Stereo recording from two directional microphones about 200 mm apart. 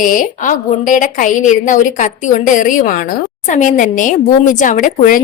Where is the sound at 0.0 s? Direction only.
45° left (ahead or behind).